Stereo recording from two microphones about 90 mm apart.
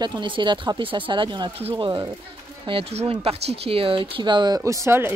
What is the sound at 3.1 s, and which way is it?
Speech, 90° right.